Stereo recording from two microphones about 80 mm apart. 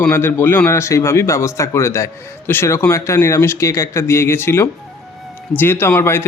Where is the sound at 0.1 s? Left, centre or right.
Left.